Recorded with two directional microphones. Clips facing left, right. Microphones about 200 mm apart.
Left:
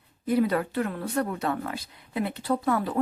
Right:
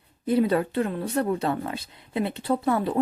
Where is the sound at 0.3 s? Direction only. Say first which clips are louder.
Right 2 dB; 25° right (ahead or behind).